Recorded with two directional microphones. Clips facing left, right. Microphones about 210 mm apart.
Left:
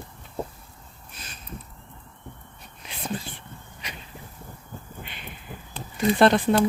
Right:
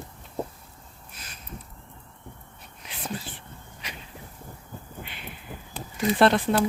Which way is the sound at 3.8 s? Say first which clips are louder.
Left 1 dB; 5° right (ahead or behind).